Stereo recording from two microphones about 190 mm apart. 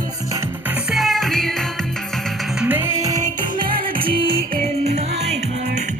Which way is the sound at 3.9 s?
25° right (ahead or behind).